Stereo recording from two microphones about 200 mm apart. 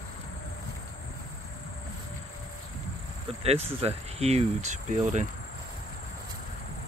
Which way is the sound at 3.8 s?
30° right (ahead or behind).